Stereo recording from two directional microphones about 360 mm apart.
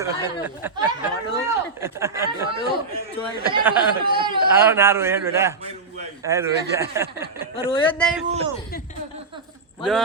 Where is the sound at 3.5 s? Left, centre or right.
Centre.